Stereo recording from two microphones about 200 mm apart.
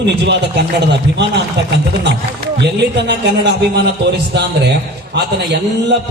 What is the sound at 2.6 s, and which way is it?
Speech, 55° right (ahead or behind).